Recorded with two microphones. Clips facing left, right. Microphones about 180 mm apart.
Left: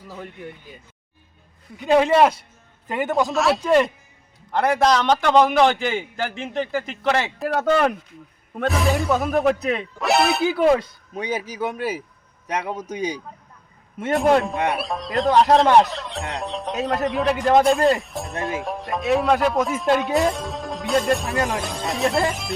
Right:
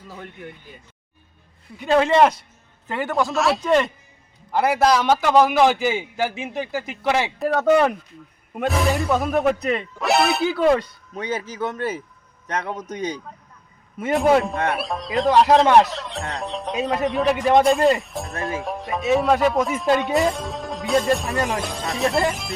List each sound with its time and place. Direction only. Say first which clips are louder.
1.8 s speech: even; 10° left (ahead or behind)
3.2 s a man's voice: even; centre (ahead or behind)
7.3 s speech: right 3 dB; centre (ahead or behind)
14.0 s speech: even; centre (ahead or behind)